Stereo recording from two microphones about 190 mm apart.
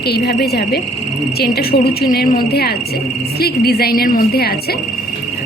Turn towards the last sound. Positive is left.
turn(degrees=50)  # may be behind; listen again after turning